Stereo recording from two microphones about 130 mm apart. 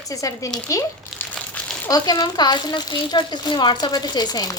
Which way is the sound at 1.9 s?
30° left (ahead or behind).